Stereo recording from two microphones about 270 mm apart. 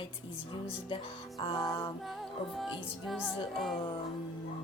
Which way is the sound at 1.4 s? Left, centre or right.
Centre.